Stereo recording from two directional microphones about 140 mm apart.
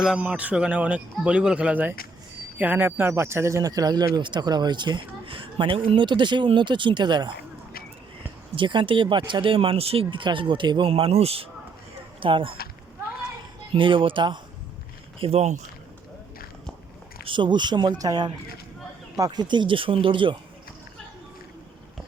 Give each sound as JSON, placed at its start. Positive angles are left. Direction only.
{"t": 0.0, "sound": "speech", "side_deg": -5}
{"t": 8.5, "sound": "speech", "side_deg": -35}
{"t": 13.7, "sound": "speech", "side_deg": -35}
{"t": 15.2, "sound": "speech", "side_deg": -45}
{"t": 17.2, "sound": "speech", "side_deg": -35}